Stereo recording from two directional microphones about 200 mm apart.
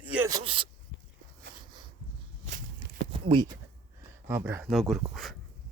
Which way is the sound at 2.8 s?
25° right (ahead or behind).